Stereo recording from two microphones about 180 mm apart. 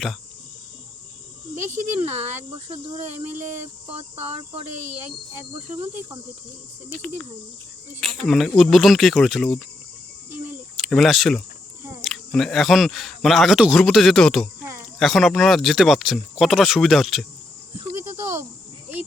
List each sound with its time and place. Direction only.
2.6 s speech: 30° right (ahead or behind)
5.4 s speech: 15° right (ahead or behind)
8.0 s speech: centre (ahead or behind)
10.8 s speech: centre (ahead or behind)